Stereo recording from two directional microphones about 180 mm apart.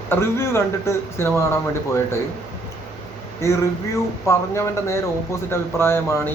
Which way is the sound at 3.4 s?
15° left (ahead or behind).